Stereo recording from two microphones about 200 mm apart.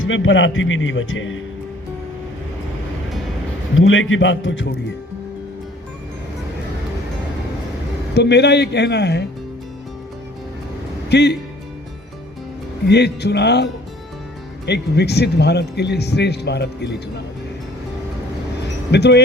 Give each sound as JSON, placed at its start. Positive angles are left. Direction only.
{"t": 0.0, "sound": "a man's voice", "side_deg": 75}
{"t": 3.8, "sound": "a man's voice", "side_deg": 75}
{"t": 8.1, "sound": "speech", "side_deg": 55}
{"t": 11.1, "sound": "speech", "side_deg": 55}
{"t": 12.9, "sound": "speech", "side_deg": 55}
{"t": 14.7, "sound": "speech", "side_deg": 55}
{"t": 18.9, "sound": "speech", "side_deg": 55}